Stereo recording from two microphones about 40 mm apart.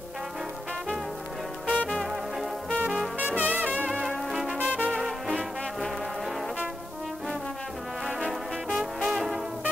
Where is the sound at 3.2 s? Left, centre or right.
Right.